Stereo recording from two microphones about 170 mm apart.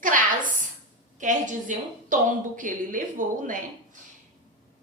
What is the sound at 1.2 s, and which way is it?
A woman's voice, 50° right (ahead or behind).